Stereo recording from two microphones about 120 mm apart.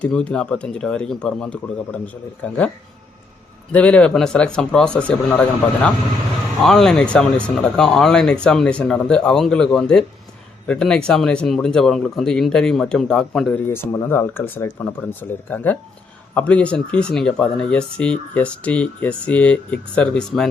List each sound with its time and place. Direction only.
0.0 s speech: 10° left (ahead or behind)
3.7 s speech: 10° left (ahead or behind)
13.7 s speech: 20° left (ahead or behind)